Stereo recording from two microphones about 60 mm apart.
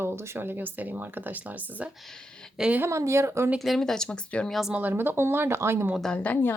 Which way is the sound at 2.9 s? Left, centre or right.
Right.